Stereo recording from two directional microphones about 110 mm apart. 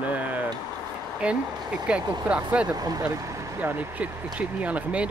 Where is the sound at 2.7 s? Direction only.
35° right (ahead or behind).